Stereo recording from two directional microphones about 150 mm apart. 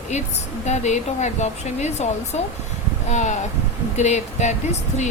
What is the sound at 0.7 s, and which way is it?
A woman's voice, 50° left (ahead or behind).